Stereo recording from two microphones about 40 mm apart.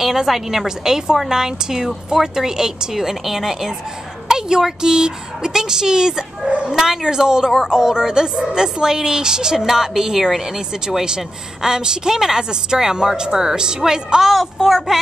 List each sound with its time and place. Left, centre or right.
0.0 s a woman's voice: centre
14.3 s speech: centre